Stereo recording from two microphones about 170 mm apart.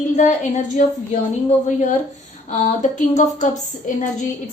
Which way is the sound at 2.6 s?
45° left (ahead or behind).